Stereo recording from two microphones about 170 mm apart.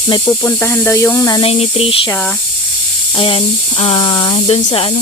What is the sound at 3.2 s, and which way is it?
Speech, 35° left (ahead or behind).